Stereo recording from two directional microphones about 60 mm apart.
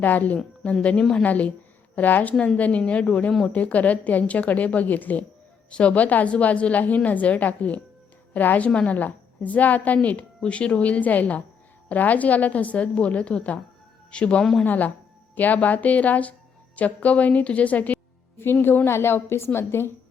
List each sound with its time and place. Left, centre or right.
0.0 s a woman's voice: left
18.9 s a woman's voice: left